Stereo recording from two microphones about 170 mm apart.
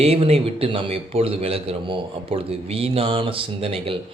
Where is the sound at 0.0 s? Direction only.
35° right (ahead or behind).